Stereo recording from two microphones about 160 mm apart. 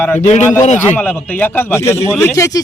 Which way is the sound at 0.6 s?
50° left (ahead or behind).